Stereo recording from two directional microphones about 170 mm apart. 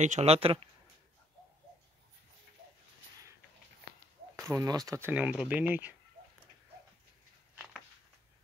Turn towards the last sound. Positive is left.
turn(degrees=-5)  # may be behind; listen again after turning